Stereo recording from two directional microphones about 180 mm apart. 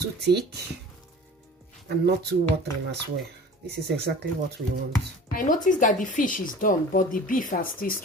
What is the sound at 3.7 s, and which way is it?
Speech, 65° right (ahead or behind).